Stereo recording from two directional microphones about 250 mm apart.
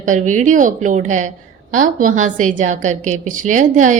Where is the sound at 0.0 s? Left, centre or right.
Right.